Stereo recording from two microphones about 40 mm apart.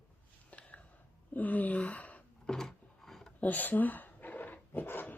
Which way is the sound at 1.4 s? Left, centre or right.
Left.